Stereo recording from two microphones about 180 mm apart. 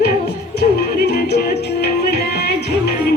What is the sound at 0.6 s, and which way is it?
Music, 65° left (ahead or behind).